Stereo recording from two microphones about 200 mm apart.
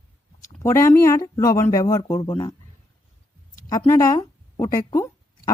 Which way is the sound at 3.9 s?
15° left (ahead or behind).